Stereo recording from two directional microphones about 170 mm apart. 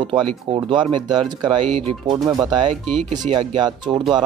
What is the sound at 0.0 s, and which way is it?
Speech, 30° right (ahead or behind).